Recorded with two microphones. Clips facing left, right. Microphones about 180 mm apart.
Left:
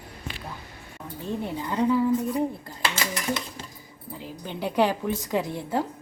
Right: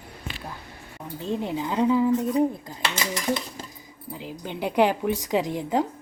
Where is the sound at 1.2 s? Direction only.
15° right (ahead or behind).